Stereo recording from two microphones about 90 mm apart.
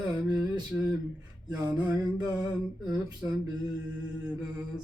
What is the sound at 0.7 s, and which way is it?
Speech, 15° right (ahead or behind).